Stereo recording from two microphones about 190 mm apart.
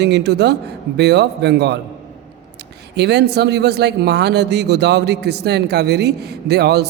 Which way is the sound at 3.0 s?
60° right (ahead or behind).